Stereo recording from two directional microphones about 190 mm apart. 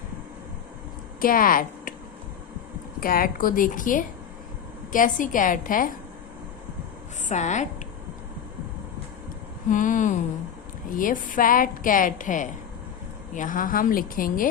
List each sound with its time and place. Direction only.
1.2 s a woman's voice: 50° left (ahead or behind)
3.0 s a woman's voice: 50° left (ahead or behind)
7.3 s a woman's voice: 40° left (ahead or behind)
9.6 s a woman's voice: 45° left (ahead or behind)